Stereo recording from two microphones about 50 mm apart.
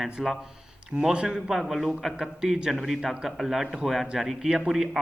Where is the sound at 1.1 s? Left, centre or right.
Centre.